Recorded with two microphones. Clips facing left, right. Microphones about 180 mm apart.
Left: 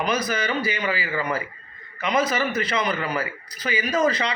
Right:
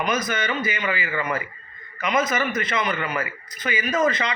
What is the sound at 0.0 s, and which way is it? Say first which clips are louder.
A man's voice: even; 35° left (ahead or behind).